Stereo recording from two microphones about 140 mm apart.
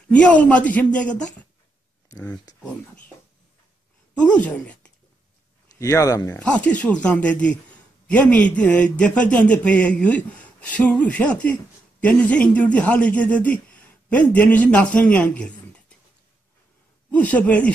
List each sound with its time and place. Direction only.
0.1 s a man's voice: 10° left (ahead or behind)
2.0 s a sound: 25° left (ahead or behind)
4.3 s speech: 10° left (ahead or behind)
5.8 s speech: 25° left (ahead or behind)
6.4 s a man's voice: 10° left (ahead or behind)
17.1 s a man's voice: 10° left (ahead or behind)